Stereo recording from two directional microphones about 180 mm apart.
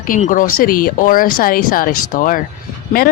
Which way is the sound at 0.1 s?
45° left (ahead or behind).